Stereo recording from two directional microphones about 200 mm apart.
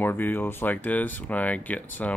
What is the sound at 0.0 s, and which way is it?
Speech, 10° left (ahead or behind).